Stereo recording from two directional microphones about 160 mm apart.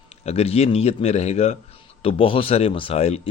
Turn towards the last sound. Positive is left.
turn(degrees=40)  # may be behind; listen again after turning